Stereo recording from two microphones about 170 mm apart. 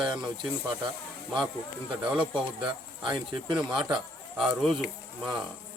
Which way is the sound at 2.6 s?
30° right (ahead or behind).